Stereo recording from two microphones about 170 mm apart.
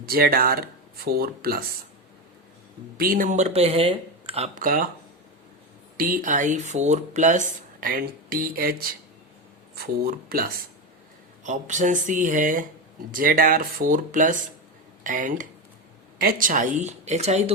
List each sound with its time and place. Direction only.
0.0 s speech: 60° right (ahead or behind)
3.0 s speech: 55° right (ahead or behind); by 4.6 s 40° right (ahead or behind)
4.6 s speech: 55° right (ahead or behind)
6.0 s speech: 55° right (ahead or behind)
11.4 s speech: 45° right (ahead or behind)